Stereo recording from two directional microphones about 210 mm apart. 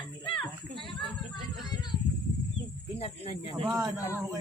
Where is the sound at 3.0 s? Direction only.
30° left (ahead or behind).